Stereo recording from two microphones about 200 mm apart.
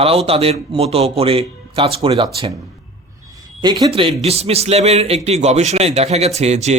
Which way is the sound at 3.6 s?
25° right (ahead or behind).